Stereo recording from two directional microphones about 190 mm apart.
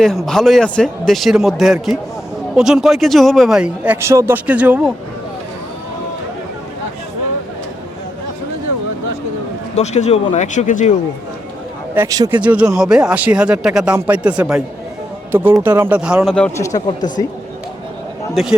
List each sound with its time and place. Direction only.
0.3 s a man's voice: centre (ahead or behind)
9.7 s speech: 35° left (ahead or behind)
11.9 s speech: 20° right (ahead or behind)
12.3 s a man's voice: 5° right (ahead or behind)
15.6 s a man's voice: 10° right (ahead or behind)
16.6 s speech: 20° left (ahead or behind)